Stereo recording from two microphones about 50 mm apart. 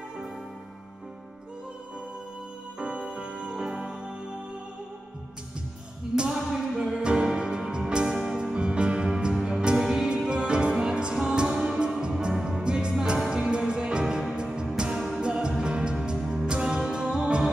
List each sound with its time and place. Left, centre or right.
2.8 s music: centre
6.1 s a sound: centre
6.8 s music: centre
8.5 s music: centre
16.2 s music: centre